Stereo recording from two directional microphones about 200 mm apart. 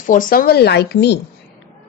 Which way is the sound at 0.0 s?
40° left (ahead or behind).